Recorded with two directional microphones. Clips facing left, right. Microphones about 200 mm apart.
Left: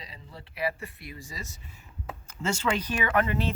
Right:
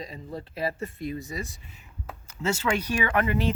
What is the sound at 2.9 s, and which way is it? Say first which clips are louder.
Speech: right 2 dB; 10° right (ahead or behind).